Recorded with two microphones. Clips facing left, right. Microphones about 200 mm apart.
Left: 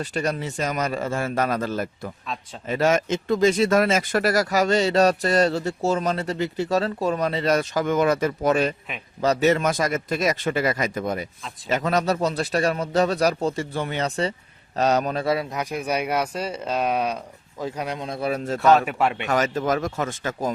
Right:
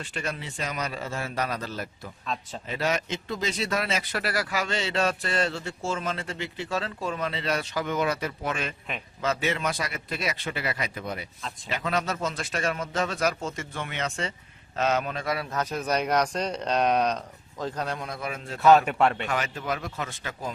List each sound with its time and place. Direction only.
0.0 s speech: 40° left (ahead or behind)
2.2 s a man's voice: centre (ahead or behind)
2.6 s speech: 50° left (ahead or behind); by 15.4 s 30° left (ahead or behind)
15.4 s speech: 10° left (ahead or behind); by 18.6 s 40° left (ahead or behind)
18.6 s a man's voice: centre (ahead or behind)
19.3 s speech: 40° left (ahead or behind)